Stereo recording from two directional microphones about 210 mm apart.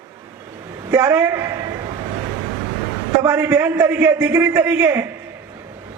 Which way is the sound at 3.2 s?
5° right (ahead or behind).